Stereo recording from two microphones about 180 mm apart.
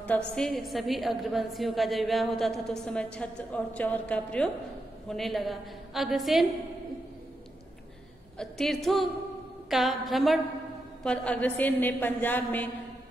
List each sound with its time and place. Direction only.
0.0 s a woman's voice: 5° left (ahead or behind)
8.4 s a woman's voice: centre (ahead or behind)